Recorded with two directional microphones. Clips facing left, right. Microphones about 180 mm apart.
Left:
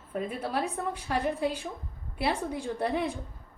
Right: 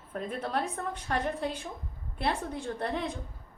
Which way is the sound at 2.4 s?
15° left (ahead or behind).